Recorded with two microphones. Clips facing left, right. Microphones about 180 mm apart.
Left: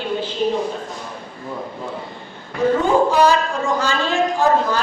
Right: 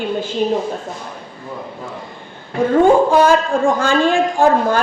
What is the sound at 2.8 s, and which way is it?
A man's voice, 55° right (ahead or behind).